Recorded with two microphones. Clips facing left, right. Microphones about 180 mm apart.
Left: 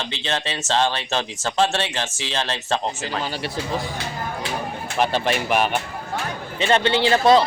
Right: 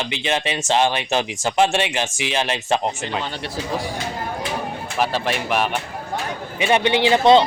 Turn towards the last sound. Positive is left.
turn(degrees=-20)  # may be behind; listen again after turning